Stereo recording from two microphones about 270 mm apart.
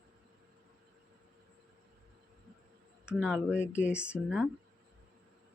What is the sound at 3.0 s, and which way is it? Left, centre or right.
Speech, centre.